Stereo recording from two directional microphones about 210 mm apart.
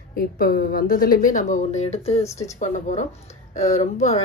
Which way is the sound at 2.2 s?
15° left (ahead or behind).